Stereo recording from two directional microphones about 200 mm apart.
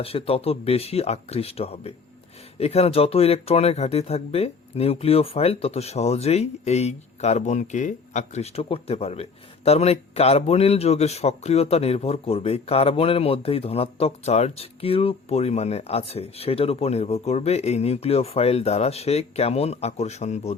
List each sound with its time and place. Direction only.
0.0 s a man's voice: 30° left (ahead or behind)